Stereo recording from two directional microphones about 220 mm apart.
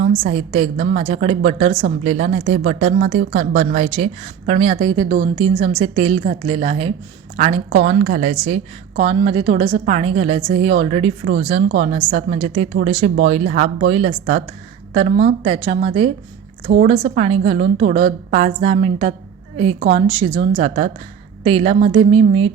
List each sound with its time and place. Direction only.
0.2 s a woman's voice: 30° right (ahead or behind)
16.9 s a woman's voice: 25° right (ahead or behind)